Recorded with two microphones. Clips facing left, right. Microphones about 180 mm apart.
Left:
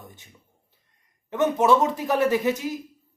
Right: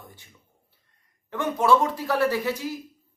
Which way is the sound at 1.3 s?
20° left (ahead or behind).